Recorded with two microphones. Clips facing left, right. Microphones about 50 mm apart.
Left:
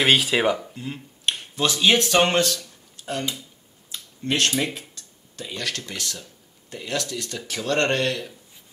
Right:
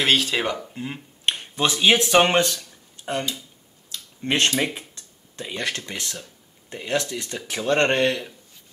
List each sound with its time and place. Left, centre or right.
0.0 s speech: centre
0.7 s speech: right